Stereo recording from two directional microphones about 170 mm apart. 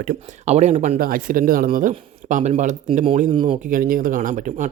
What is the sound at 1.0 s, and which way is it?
Speech, 55° right (ahead or behind).